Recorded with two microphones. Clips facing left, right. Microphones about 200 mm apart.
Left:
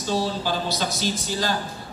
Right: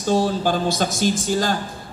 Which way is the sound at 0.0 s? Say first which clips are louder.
Right 6 dB; 50° right (ahead or behind).